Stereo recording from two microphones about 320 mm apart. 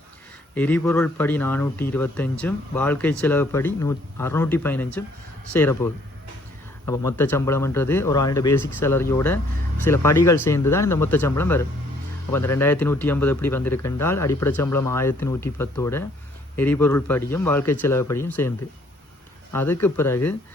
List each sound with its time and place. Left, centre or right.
0.5 s a man's voice: centre
19.5 s a man's voice: centre